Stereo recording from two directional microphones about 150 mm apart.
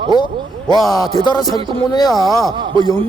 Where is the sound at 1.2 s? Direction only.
30° left (ahead or behind).